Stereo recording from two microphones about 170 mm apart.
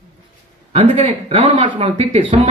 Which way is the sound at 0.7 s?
40° right (ahead or behind).